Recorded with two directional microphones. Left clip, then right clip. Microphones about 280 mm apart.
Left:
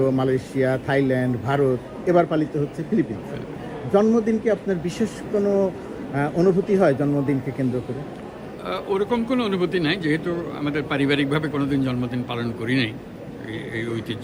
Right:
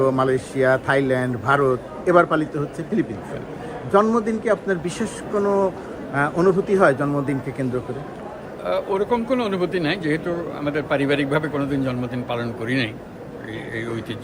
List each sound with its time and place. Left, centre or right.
0.0 s speech: centre
6.1 s a man's voice: centre
8.6 s speech: centre